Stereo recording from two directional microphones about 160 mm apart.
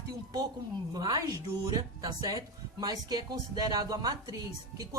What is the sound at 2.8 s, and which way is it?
Speech, 25° right (ahead or behind).